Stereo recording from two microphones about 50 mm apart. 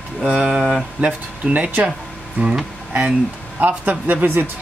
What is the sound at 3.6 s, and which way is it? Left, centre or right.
Speech, right.